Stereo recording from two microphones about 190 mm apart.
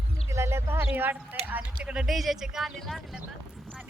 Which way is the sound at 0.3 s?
15° right (ahead or behind).